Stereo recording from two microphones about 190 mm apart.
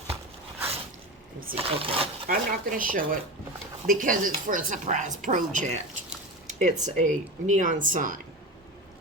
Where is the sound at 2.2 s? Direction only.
50° right (ahead or behind).